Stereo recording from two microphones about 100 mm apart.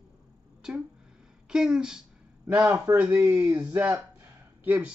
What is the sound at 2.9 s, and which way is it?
Speech, 40° right (ahead or behind).